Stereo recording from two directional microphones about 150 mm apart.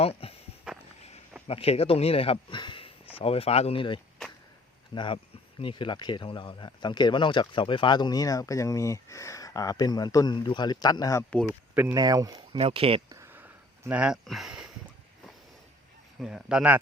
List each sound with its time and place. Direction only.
0.0 s a sound: 40° left (ahead or behind)
0.7 s walk: 5° right (ahead or behind)
1.5 s speech: 40° left (ahead or behind); by 11.3 s 20° left (ahead or behind)
11.7 s speech: 10° right (ahead or behind)
11.9 s speech: 25° right (ahead or behind)
12.5 s speech: 40° right (ahead or behind)
13.1 s a sound: 20° right (ahead or behind)
16.2 s speech: 5° right (ahead or behind)